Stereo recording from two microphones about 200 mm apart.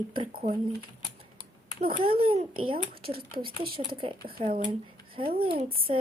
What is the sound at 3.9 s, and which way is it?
Speech, 25° right (ahead or behind).